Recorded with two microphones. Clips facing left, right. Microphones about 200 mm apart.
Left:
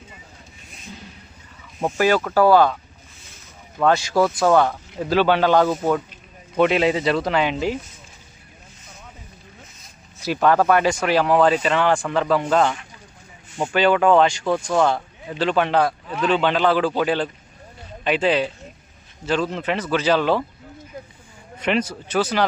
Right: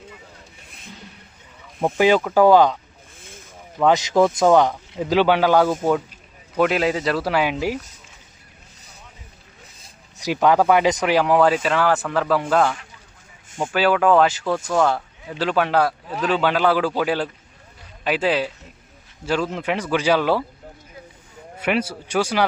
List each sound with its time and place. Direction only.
2.0 s speech: 15° right (ahead or behind)
3.2 s a sound: 50° right (ahead or behind)
3.8 s speech: 15° right (ahead or behind)
6.6 s speech: centre (ahead or behind)
10.2 s speech: 15° right (ahead or behind)
21.6 s speech: 10° right (ahead or behind)